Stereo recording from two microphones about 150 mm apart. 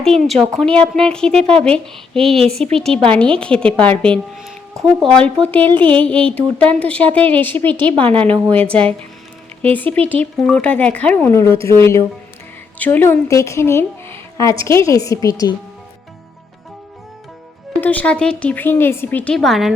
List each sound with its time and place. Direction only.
0.0 s a woman's voice: 5° left (ahead or behind)
8.3 s a woman's voice: 35° right (ahead or behind)
8.7 s a woman's voice: 10° left (ahead or behind); by 15.5 s 25° left (ahead or behind)
17.7 s a woman's voice: 10° left (ahead or behind)